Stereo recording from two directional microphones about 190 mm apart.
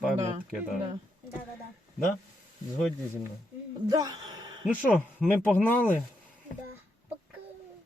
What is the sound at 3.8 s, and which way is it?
Speech, 20° right (ahead or behind).